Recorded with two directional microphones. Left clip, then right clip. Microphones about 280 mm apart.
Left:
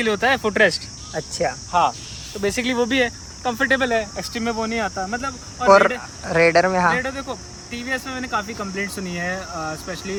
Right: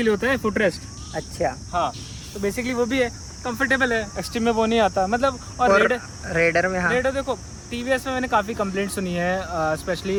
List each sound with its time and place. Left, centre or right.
0.0 s speech: centre
1.1 s speech: centre
2.4 s speech: left; by 6.0 s centre
6.2 s speech: centre